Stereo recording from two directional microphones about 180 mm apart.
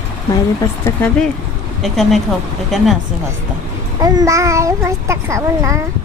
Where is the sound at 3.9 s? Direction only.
20° right (ahead or behind).